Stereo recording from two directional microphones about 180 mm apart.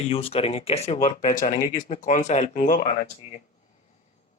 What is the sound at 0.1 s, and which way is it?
Speech, 30° left (ahead or behind).